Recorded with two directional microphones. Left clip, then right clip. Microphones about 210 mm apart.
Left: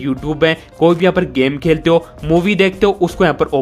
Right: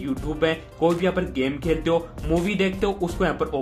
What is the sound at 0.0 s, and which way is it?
Speech, 35° left (ahead or behind).